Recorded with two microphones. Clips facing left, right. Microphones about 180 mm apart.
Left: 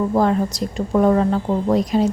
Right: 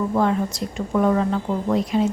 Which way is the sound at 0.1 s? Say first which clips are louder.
Left 3 dB; 35° left (ahead or behind).